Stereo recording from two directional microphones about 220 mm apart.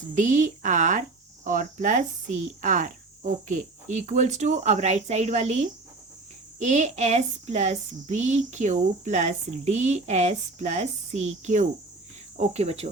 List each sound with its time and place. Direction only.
0.1 s speech: 35° right (ahead or behind)
12.4 s cricket: 30° right (ahead or behind)